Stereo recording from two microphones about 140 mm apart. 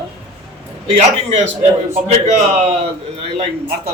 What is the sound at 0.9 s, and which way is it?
Speech, 50° right (ahead or behind).